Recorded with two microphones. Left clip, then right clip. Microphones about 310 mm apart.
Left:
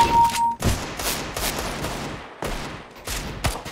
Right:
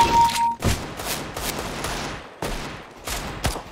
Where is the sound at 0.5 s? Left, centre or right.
Left.